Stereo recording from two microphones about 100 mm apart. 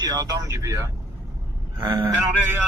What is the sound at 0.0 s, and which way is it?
Speech, 40° right (ahead or behind).